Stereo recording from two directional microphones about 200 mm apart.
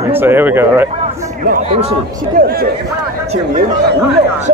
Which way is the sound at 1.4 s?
40° right (ahead or behind).